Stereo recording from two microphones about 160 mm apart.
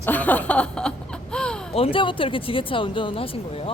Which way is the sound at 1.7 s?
35° left (ahead or behind).